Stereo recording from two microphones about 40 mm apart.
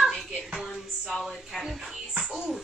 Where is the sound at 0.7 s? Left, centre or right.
Centre.